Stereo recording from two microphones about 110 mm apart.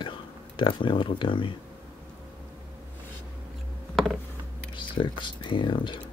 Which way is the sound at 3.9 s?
Centre (ahead or behind).